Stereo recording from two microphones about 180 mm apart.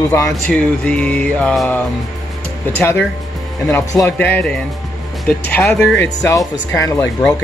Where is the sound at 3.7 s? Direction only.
15° left (ahead or behind).